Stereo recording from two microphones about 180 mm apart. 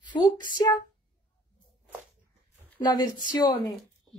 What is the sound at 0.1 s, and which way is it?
Speech, 20° left (ahead or behind).